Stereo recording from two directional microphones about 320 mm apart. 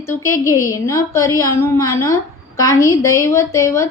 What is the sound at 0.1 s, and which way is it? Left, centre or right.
A woman's voice, centre.